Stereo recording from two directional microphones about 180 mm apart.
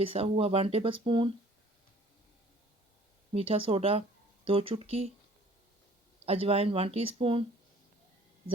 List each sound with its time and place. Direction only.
0.0 s speech: 30° right (ahead or behind)
3.3 s speech: 30° right (ahead or behind)
6.2 s speech: 35° right (ahead or behind)